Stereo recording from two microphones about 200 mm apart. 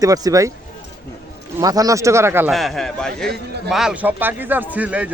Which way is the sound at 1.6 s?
20° right (ahead or behind).